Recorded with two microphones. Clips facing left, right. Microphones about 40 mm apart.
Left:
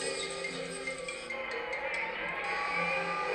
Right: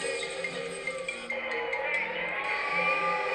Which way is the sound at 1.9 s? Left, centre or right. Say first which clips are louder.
Right 4 dB; right.